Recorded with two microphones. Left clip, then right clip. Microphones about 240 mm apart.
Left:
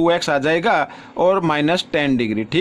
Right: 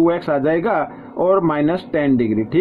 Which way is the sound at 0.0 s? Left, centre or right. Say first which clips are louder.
Even; left.